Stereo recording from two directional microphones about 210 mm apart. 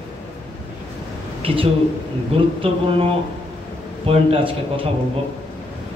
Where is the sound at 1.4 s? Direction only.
25° right (ahead or behind).